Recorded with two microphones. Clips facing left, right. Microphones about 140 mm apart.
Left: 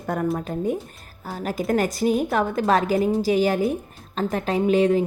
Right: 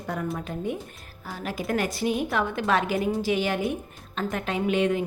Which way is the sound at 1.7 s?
40° left (ahead or behind).